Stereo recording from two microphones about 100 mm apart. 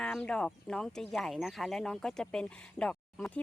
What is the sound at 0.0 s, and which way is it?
Speech, 10° left (ahead or behind).